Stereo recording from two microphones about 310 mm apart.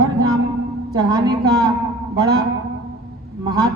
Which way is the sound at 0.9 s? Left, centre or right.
Centre.